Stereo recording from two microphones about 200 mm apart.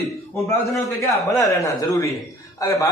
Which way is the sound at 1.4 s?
15° left (ahead or behind).